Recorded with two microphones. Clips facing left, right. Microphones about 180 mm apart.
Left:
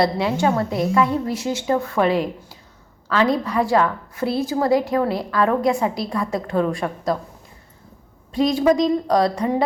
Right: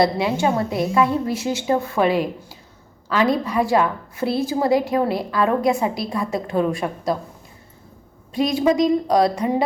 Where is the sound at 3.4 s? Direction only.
25° right (ahead or behind).